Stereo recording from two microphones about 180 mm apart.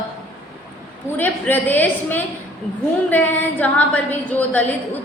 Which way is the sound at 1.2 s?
10° left (ahead or behind).